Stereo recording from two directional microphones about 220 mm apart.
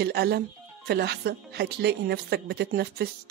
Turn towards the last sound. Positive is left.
turn(degrees=-45)  # may be behind; listen again after turning